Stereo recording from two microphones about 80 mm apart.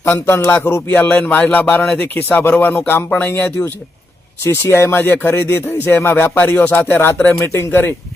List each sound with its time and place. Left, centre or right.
0.0 s music: left
1.0 s speech: left